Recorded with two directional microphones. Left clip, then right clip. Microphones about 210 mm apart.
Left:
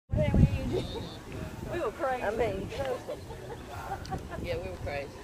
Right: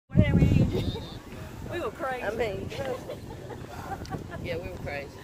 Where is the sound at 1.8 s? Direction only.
30° right (ahead or behind).